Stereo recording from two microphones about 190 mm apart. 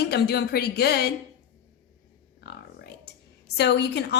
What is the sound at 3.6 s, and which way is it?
Speech, 65° left (ahead or behind).